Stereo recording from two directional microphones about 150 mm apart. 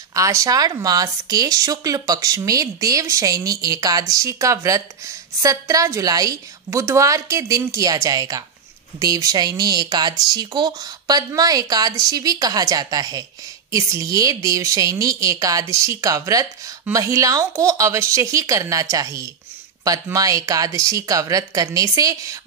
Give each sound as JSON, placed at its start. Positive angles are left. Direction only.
{"t": 0.1, "sound": "speech", "side_deg": -20}